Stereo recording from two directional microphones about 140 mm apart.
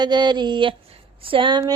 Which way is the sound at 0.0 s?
30° right (ahead or behind).